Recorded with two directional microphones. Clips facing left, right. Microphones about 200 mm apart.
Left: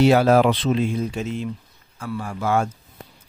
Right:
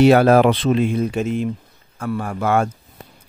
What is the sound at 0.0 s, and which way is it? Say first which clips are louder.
Speech: right 3 dB; 60° right (ahead or behind).